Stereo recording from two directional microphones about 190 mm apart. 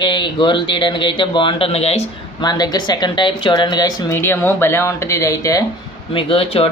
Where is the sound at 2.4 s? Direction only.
20° left (ahead or behind).